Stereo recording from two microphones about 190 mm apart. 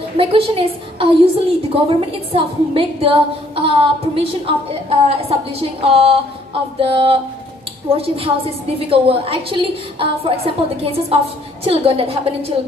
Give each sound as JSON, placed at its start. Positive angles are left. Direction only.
{"t": 0.2, "sound": "a woman's voice", "side_deg": -30}